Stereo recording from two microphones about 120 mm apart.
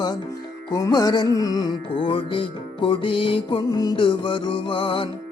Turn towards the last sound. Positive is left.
turn(degrees=45)  # may be behind; listen again after turning